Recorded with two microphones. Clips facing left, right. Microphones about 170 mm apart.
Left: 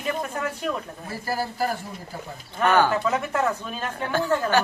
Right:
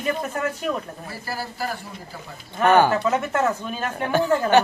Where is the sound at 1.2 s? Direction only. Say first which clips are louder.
Left 4 dB; 45° left (ahead or behind).